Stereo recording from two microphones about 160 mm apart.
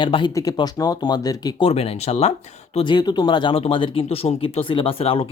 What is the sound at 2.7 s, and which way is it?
Speech, 30° left (ahead or behind).